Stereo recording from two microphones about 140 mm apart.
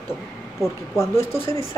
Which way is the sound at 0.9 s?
20° left (ahead or behind).